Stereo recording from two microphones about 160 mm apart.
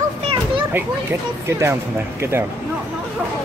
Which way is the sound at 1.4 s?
15° right (ahead or behind).